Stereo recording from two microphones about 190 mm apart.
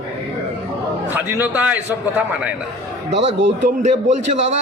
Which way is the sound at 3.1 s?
75° right (ahead or behind).